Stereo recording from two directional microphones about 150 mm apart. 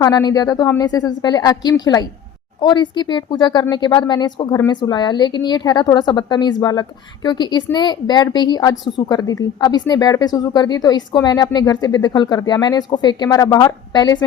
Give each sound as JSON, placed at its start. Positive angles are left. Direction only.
{"t": 0.0, "sound": "a woman's voice", "side_deg": 25}